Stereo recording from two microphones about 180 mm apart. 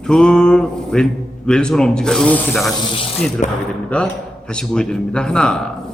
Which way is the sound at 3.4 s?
40° left (ahead or behind).